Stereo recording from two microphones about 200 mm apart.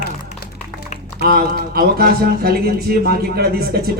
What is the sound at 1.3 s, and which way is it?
Speech, 50° right (ahead or behind).